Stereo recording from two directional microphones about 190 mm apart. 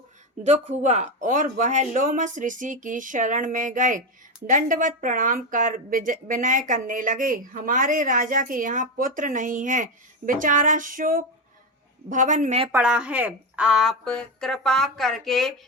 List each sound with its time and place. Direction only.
0.8 s speech: 40° right (ahead or behind)
12.7 s a woman's voice: 5° right (ahead or behind)